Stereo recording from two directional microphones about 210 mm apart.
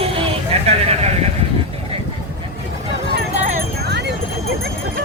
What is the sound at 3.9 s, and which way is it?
Clip-clop, 55° right (ahead or behind).